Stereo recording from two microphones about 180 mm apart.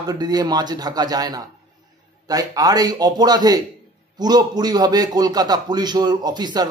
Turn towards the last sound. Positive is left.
turn(degrees=-20)  # may be behind; listen again after turning